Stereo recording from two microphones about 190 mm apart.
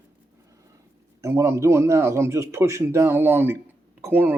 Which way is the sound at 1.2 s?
15° right (ahead or behind).